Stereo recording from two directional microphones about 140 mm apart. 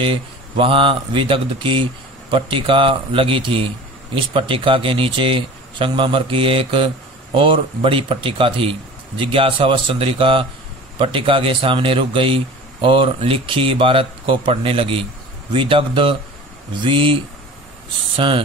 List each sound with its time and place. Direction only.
0.0 s speech: 40° right (ahead or behind)